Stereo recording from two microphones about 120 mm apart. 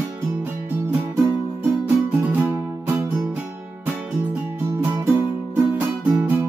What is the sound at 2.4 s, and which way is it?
Music, 25° right (ahead or behind).